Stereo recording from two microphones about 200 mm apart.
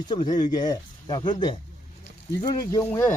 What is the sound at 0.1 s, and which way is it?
Speech, 20° left (ahead or behind).